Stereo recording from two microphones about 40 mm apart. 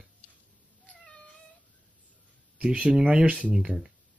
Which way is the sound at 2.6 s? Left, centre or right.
Right.